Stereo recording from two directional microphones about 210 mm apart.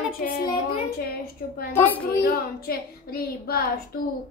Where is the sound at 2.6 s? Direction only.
45° left (ahead or behind).